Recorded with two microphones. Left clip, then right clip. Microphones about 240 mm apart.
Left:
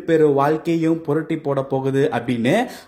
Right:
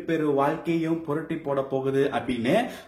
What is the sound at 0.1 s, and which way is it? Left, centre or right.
Speech, left.